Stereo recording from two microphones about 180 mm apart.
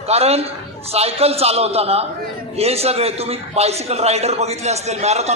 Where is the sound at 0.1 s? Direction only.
35° right (ahead or behind).